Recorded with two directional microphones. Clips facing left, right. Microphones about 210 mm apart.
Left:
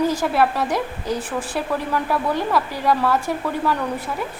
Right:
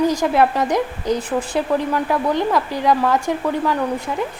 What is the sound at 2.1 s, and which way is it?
A woman's voice, 20° right (ahead or behind).